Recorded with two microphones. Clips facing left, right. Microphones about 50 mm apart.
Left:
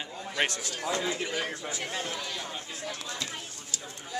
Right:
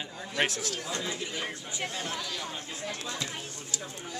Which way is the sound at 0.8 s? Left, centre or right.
Left.